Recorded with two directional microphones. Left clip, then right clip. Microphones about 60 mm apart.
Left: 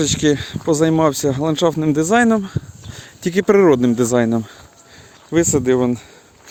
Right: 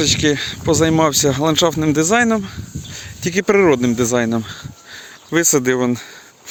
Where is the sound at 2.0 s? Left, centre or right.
Left.